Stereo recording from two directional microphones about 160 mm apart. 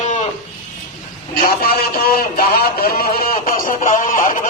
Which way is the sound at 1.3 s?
70° left (ahead or behind).